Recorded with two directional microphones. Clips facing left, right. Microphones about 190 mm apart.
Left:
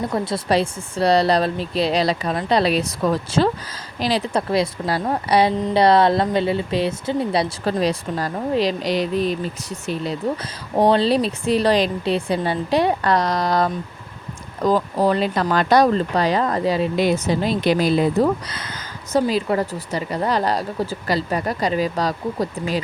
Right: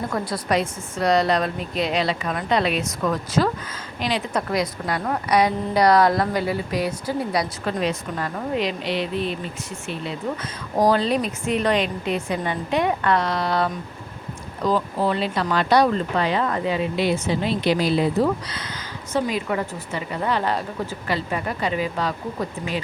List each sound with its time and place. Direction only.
0.1 s a woman's voice: 25° left (ahead or behind)
7.6 s speech: 35° left (ahead or behind)
10.8 s speech: 25° left (ahead or behind); by 18.7 s 50° left (ahead or behind)
19.1 s speech: 35° left (ahead or behind)